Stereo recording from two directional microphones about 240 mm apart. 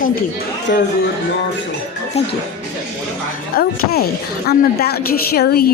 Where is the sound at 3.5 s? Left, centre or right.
Left.